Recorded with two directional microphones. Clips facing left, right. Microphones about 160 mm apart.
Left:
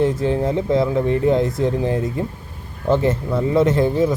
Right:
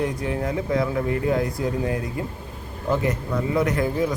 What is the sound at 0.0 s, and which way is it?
Speech, 25° left (ahead or behind).